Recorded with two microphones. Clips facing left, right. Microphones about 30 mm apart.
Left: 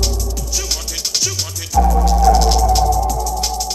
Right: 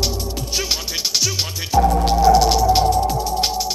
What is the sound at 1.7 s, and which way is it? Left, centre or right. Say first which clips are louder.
Music: even; right.